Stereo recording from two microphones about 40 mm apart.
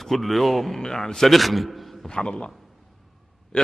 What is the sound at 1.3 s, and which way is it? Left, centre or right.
Speech, centre.